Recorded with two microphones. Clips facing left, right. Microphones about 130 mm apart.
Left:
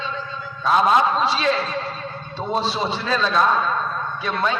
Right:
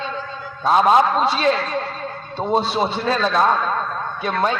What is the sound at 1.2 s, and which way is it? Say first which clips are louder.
A man's voice: right 2 dB; 50° right (ahead or behind).